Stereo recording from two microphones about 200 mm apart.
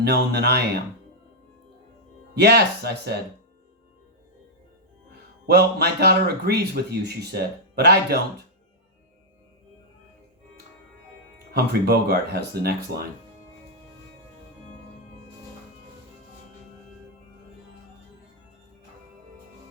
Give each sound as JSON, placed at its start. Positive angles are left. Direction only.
{"t": 0.0, "sound": "speech", "side_deg": -55}
{"t": 2.3, "sound": "speech", "side_deg": -55}
{"t": 5.1, "sound": "speech", "side_deg": -55}
{"t": 11.5, "sound": "speech", "side_deg": -55}